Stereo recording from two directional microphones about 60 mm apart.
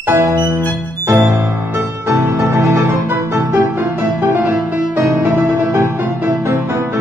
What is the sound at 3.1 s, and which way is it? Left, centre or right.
Music, right.